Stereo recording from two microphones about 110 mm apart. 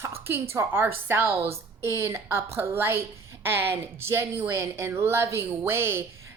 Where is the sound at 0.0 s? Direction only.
25° right (ahead or behind).